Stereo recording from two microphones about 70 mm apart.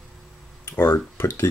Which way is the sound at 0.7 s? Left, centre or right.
Left.